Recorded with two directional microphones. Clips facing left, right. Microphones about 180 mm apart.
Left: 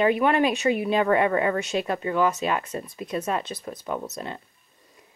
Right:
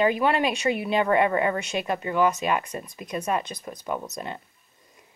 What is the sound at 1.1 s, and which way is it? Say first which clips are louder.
Speech: even; 15° right (ahead or behind).